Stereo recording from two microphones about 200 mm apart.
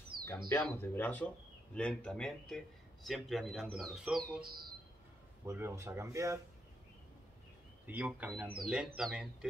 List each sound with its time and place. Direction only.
0.5 s speech: 10° left (ahead or behind); by 6.4 s 15° right (ahead or behind)
7.8 s speech: 5° right (ahead or behind)